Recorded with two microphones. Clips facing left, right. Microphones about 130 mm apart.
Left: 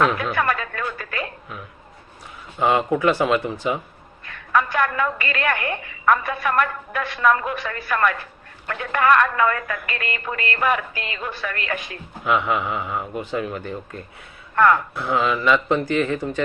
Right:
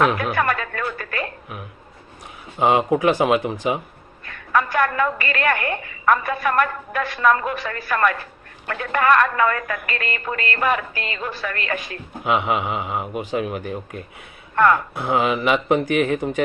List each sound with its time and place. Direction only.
0.2 s music: 50° right (ahead or behind)
2.6 s speech: 20° right (ahead or behind)
4.3 s a woman's voice: 50° right (ahead or behind)
12.2 s speech: 20° right (ahead or behind)
14.6 s speech: 20° right (ahead or behind)